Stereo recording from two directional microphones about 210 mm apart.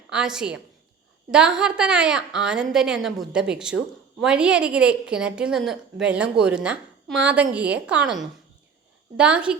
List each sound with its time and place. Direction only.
0.1 s a woman's voice: 5° right (ahead or behind)